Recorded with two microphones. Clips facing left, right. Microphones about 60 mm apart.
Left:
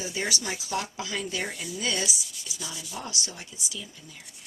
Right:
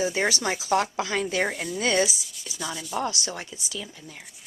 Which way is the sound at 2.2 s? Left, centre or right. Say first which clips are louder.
Right 1 dB; centre.